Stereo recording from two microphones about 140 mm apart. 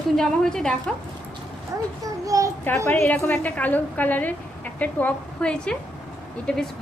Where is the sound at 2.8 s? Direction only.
10° left (ahead or behind).